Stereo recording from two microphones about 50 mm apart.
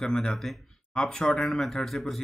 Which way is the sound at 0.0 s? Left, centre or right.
Centre.